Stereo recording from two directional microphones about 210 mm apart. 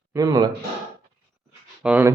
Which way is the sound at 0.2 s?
15° right (ahead or behind).